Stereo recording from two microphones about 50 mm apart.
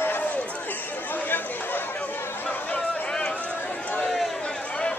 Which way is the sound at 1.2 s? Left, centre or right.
Left.